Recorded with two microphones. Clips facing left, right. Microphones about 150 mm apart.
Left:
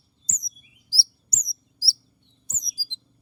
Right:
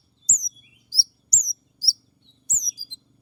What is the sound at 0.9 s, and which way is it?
Chirp, 30° left (ahead or behind).